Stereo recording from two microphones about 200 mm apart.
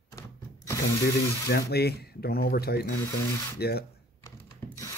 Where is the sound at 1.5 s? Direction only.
55° left (ahead or behind).